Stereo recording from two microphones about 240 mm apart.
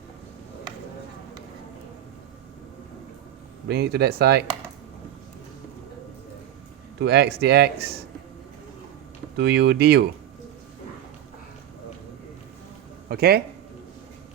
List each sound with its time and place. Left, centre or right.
3.7 s speech: right
7.0 s speech: right
9.4 s speech: right
13.1 s speech: right